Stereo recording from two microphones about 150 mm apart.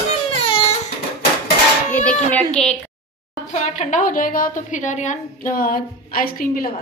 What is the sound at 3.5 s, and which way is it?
A woman's voice, 60° left (ahead or behind).